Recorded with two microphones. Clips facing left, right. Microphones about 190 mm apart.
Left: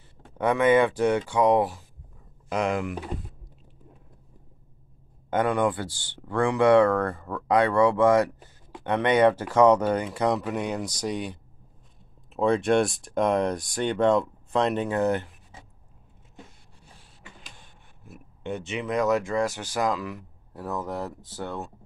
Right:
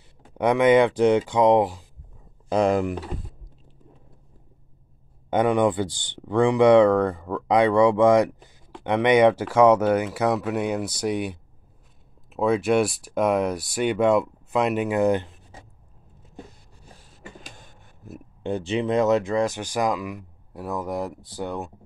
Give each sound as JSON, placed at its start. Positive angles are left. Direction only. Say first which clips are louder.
{"t": 0.4, "sound": "speech", "louder": "right 3 dB", "side_deg": -15}
{"t": 2.5, "sound": "speech", "louder": "right 6 dB", "side_deg": -35}
{"t": 5.3, "sound": "speech", "louder": "right 4 dB", "side_deg": -15}
{"t": 16.8, "sound": "speech", "louder": "right 7 dB", "side_deg": -40}